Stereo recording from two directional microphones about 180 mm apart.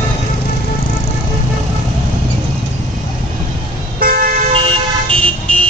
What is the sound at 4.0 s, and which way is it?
Vehicle, 55° right (ahead or behind).